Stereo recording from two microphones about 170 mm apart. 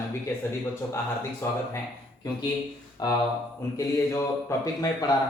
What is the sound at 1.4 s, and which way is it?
Speech, 15° left (ahead or behind).